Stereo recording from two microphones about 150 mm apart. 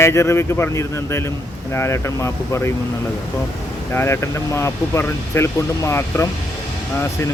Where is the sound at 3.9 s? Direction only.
15° left (ahead or behind).